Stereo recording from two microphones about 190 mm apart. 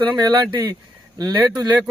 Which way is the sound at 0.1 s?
20° right (ahead or behind).